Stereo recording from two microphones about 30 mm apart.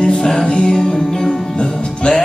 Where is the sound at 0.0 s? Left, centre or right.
Left.